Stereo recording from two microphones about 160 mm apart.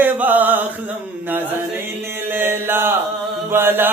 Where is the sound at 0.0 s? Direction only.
10° right (ahead or behind).